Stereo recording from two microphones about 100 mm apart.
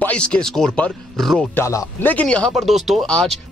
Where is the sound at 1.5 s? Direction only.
30° left (ahead or behind).